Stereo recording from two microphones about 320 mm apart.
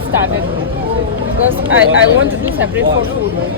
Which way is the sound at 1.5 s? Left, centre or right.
Right.